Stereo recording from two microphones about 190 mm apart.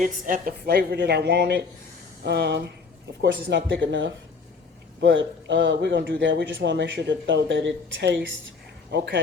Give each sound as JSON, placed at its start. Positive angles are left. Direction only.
{"t": 0.0, "sound": "a man's voice", "side_deg": -45}